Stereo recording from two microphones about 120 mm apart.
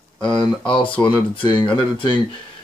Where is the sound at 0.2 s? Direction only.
45° left (ahead or behind).